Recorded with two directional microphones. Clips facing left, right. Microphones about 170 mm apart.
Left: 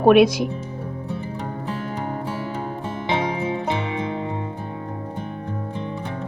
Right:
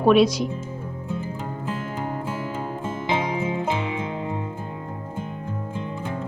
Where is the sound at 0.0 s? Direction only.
60° left (ahead or behind).